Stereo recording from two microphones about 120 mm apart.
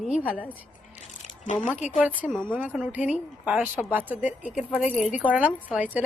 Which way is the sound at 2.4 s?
15° right (ahead or behind).